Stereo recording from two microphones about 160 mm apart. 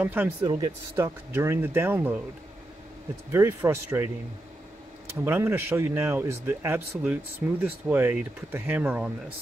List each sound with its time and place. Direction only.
0.0 s speech: 10° right (ahead or behind)
3.3 s speech: 15° right (ahead or behind)
5.2 s speech: 15° right (ahead or behind)